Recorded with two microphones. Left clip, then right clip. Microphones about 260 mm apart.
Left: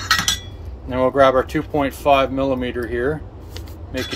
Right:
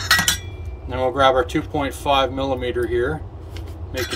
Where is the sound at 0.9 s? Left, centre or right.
Centre.